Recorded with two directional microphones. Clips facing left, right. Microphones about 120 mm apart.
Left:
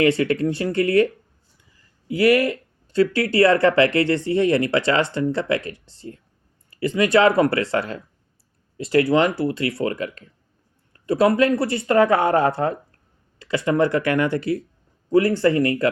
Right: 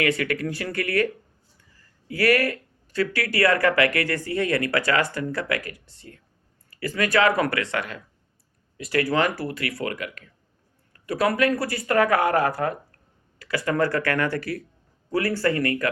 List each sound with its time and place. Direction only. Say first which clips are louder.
0.0 s speech: left 6 dB; 30° left (ahead or behind)